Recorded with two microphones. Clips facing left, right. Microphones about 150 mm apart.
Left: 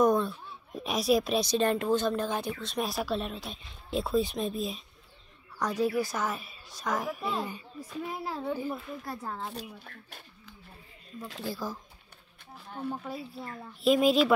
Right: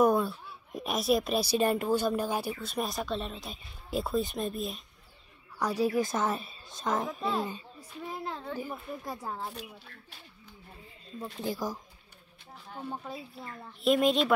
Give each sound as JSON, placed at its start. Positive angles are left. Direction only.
{"t": 0.0, "sound": "a woman's voice", "side_deg": -5}
{"t": 5.6, "sound": "a woman's voice", "side_deg": -10}
{"t": 8.1, "sound": "a woman's voice", "side_deg": 5}
{"t": 8.5, "sound": "speech", "side_deg": -15}
{"t": 11.4, "sound": "speech", "side_deg": -15}
{"t": 13.0, "sound": "a woman's voice", "side_deg": 0}